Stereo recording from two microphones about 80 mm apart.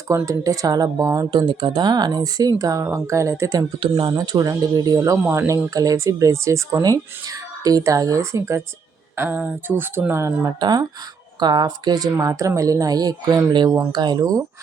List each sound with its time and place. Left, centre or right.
0.3 s speech: right
1.3 s speech: right
3.8 s speech: right
4.1 s speech: right
10.6 s speech: right
12.1 s speech: right
14.2 s speech: right